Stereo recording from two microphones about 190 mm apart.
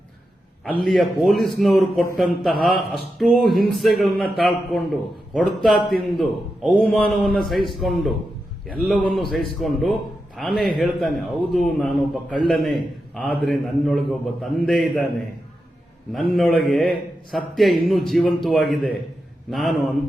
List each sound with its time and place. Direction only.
0.6 s speech: centre (ahead or behind)
16.6 s speech: centre (ahead or behind)